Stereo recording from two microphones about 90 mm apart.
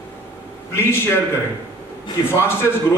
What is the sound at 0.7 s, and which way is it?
Speech, 25° left (ahead or behind).